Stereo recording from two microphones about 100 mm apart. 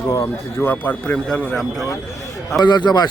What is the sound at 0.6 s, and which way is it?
A man's voice, 20° left (ahead or behind).